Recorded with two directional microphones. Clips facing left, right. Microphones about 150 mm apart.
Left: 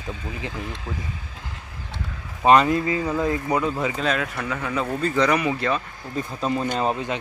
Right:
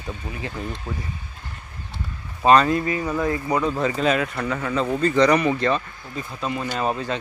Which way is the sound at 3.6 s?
10° left (ahead or behind).